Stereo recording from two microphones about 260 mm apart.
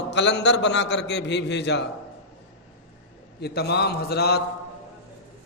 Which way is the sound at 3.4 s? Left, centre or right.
Left.